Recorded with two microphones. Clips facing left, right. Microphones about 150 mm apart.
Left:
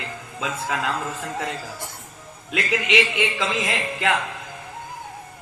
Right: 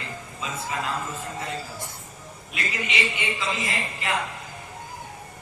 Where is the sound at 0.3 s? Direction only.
90° left.